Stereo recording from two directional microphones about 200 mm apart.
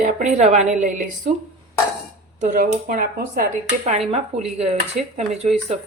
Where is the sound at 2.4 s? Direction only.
45° right (ahead or behind).